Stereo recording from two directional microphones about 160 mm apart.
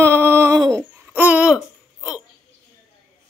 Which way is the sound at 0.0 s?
15° right (ahead or behind).